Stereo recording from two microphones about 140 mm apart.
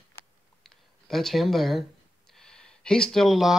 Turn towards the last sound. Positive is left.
turn(degrees=0)  # may be behind; listen again after turning